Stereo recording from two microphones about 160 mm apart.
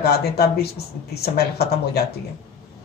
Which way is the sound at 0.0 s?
75° left (ahead or behind).